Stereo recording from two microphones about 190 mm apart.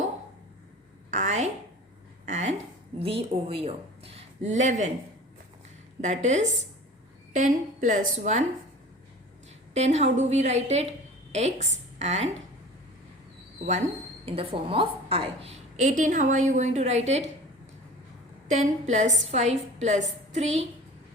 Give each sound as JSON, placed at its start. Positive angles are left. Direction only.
{"t": 1.1, "sound": "a sound", "side_deg": -40}
{"t": 3.0, "sound": "speech", "side_deg": -30}
{"t": 6.0, "sound": "a woman's voice", "side_deg": -40}
{"t": 9.7, "sound": "a woman's voice", "side_deg": -35}
{"t": 14.3, "sound": "a woman's voice", "side_deg": -30}
{"t": 18.6, "sound": "a woman's voice", "side_deg": -40}